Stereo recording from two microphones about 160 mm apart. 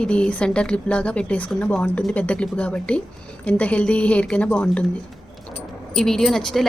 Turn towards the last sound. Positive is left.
turn(degrees=0)  # may be behind; listen again after turning